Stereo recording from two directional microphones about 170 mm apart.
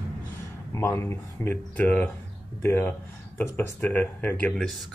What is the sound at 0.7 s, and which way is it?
Speech, 15° left (ahead or behind).